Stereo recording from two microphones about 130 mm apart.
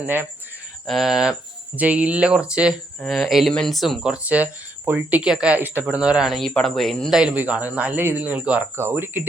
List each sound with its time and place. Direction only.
0.0 s speech: 15° right (ahead or behind)
0.9 s speech: centre (ahead or behind)
7.2 s speech: 10° right (ahead or behind)